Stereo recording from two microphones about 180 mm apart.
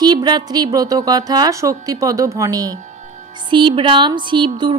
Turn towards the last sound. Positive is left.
turn(degrees=-25)  # may be behind; listen again after turning